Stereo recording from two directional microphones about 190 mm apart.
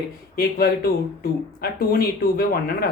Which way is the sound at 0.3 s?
50° left (ahead or behind).